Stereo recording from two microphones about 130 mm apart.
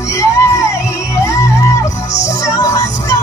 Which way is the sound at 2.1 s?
65° left (ahead or behind).